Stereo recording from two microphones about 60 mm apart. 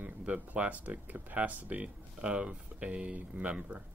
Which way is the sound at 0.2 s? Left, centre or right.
Right.